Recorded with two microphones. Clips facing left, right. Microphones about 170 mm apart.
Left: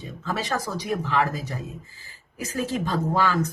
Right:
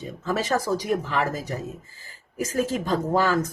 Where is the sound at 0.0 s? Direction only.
40° right (ahead or behind).